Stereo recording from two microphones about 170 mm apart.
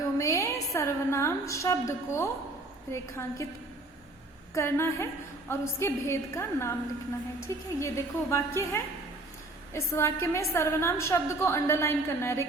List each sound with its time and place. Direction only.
0.0 s a woman's voice: 20° left (ahead or behind)
4.5 s a woman's voice: 15° left (ahead or behind)